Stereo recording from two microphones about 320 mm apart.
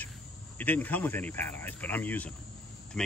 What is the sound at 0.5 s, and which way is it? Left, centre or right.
Speech, centre.